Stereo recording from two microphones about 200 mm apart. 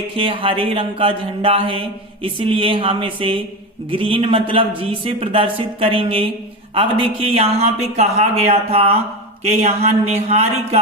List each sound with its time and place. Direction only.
0.2 s speech: 25° right (ahead or behind)